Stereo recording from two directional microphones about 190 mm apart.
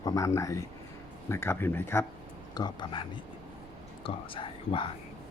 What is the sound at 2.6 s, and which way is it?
Speech, 25° left (ahead or behind).